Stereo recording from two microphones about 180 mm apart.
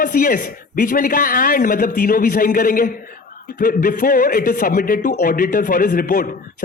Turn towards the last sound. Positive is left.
turn(degrees=50)  # may be behind; listen again after turning